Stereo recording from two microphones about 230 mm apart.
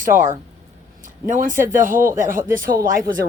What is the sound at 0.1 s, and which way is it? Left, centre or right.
Speech, centre.